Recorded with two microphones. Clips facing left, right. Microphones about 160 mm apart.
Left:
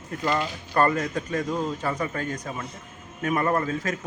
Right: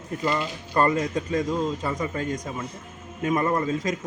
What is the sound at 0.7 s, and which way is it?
Speech, 20° right (ahead or behind).